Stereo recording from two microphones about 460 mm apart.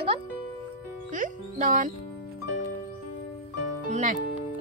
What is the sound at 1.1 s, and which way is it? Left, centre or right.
Speech, centre.